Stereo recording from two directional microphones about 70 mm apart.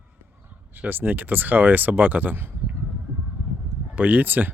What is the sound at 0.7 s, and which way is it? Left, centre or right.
Speech, right.